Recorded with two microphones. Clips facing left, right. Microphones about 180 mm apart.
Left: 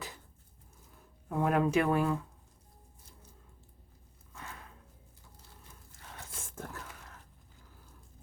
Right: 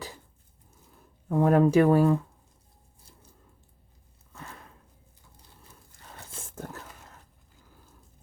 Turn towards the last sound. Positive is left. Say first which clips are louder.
# right 3 dB
turn(degrees=-25)  # may be behind; listen again after turning